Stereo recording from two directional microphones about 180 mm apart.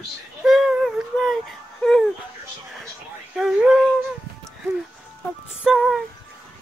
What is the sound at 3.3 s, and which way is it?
Speech, 5° right (ahead or behind).